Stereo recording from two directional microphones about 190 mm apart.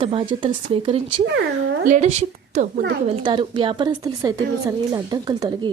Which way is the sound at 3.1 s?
25° right (ahead or behind).